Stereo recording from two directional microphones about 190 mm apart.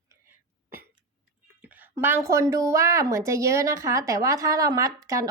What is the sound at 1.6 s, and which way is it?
A woman's voice, 10° right (ahead or behind).